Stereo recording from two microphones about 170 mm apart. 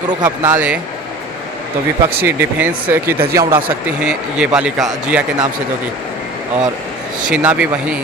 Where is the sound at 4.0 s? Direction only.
5° right (ahead or behind).